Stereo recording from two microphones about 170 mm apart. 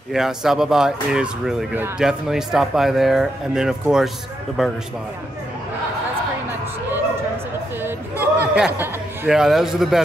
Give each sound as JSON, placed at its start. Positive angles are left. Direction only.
{"t": 0.1, "sound": "speech", "side_deg": 0}
{"t": 7.8, "sound": "a sound", "side_deg": -10}
{"t": 9.3, "sound": "speech", "side_deg": -5}